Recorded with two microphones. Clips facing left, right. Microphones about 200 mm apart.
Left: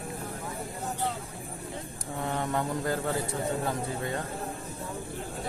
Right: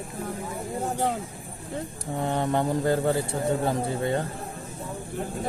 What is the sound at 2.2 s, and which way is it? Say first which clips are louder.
A man's voice: right 5 dB; 30° right (ahead or behind).